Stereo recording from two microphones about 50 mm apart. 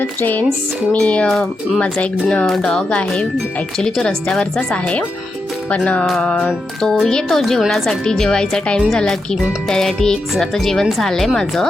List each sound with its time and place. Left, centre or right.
0.0 s a sound: left
0.9 s speech: left
2.6 s speech: centre
3.8 s speech: centre
4.0 s speech: left
6.8 s speech: centre